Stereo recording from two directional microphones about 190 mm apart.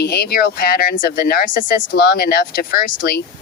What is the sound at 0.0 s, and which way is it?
Speech, 55° left (ahead or behind).